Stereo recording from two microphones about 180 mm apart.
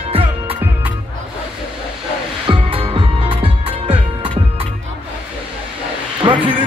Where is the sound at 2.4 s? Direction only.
30° right (ahead or behind).